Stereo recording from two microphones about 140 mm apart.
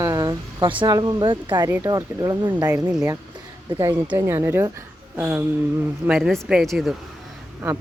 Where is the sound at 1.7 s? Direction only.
20° right (ahead or behind).